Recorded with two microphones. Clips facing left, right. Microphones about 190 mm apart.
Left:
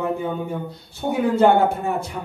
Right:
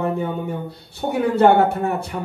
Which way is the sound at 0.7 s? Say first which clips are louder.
Even; 65° right (ahead or behind).